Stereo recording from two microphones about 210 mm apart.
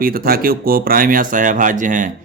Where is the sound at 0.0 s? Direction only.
45° right (ahead or behind).